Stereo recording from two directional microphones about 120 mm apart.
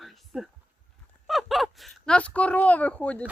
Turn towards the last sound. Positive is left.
turn(degrees=10)  # may be behind; listen again after turning